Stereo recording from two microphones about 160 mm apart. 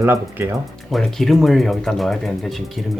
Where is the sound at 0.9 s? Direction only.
Centre (ahead or behind).